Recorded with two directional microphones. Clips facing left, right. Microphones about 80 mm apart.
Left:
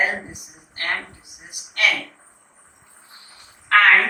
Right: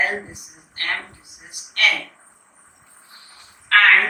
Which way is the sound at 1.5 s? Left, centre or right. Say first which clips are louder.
Right 1 dB; centre.